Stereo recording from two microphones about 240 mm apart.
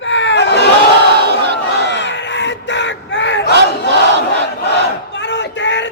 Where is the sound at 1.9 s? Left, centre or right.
Left.